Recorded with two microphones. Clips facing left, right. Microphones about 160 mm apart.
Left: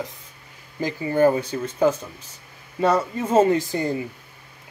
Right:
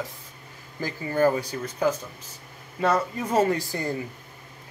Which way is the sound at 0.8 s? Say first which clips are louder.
Left 4 dB; 20° left (ahead or behind).